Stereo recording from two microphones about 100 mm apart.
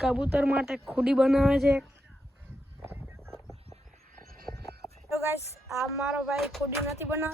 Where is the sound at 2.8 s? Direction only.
20° right (ahead or behind).